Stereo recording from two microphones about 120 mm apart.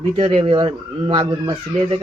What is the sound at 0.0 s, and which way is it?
Speech, 50° right (ahead or behind).